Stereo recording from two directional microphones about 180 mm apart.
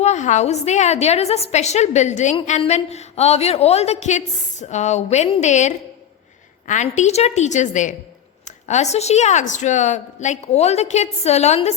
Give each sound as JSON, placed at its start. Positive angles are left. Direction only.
{"t": 0.0, "sound": "a woman's voice", "side_deg": 40}